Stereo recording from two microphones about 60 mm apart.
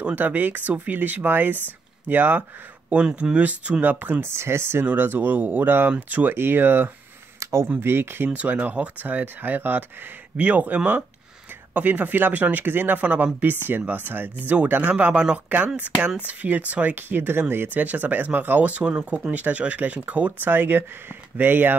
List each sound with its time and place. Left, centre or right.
0.0 s speech: right
2.9 s speech: centre
4.2 s speech: right
4.8 s speech: right
6.3 s speech: right
7.3 s a sound: right
7.8 s speech: right
8.3 s speech: right
14.5 s speech: right
15.5 s speech: right
17.7 s speech: right